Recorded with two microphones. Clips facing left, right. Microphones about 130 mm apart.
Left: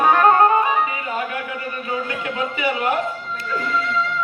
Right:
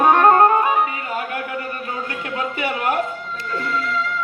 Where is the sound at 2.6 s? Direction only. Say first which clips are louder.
Left 1 dB; 50° right (ahead or behind).